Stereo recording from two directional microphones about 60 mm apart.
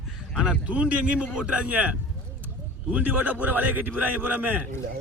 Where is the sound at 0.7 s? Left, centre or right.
Right.